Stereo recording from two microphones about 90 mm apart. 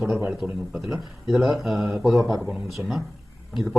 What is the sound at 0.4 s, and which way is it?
Speech, 15° right (ahead or behind).